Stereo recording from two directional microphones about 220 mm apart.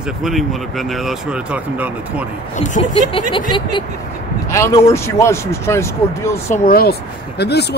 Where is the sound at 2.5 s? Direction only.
35° left (ahead or behind).